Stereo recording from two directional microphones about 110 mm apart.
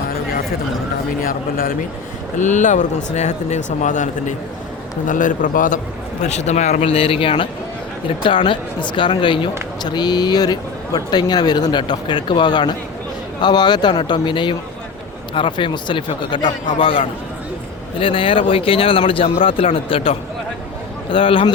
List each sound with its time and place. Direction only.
2.4 s speech: 90° left
6.2 s a man's voice: 90° left; by 21.5 s 55° left (ahead or behind)